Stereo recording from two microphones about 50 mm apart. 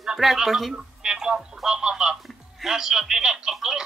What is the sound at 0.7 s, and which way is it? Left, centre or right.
Radio, centre.